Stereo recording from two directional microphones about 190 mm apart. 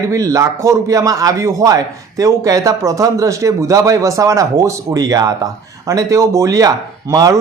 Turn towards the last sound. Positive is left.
turn(degrees=-15)  # may be behind; listen again after turning